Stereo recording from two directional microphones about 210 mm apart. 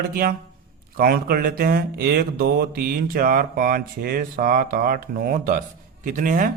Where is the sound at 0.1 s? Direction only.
45° right (ahead or behind).